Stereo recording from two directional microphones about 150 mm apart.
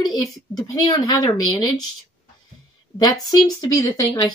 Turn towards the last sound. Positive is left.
turn(degrees=25)  # may be behind; listen again after turning